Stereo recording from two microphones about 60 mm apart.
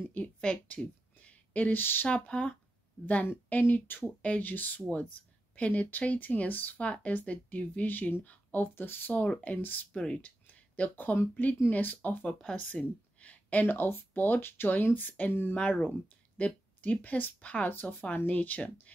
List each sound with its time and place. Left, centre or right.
0.4 s speech: centre; by 2.0 s left
2.0 s speech: centre
3.3 s speech: left
4.2 s speech: left
9.9 s speech: centre
10.5 s a sound: left
11.3 s speech: left
12.4 s speech: centre; by 15.5 s left
15.5 s speech: left
17.6 s speech: left